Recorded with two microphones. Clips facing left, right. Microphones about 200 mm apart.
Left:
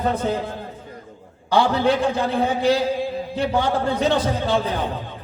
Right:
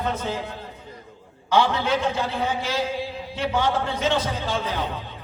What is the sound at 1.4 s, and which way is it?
A man's voice, 35° left (ahead or behind).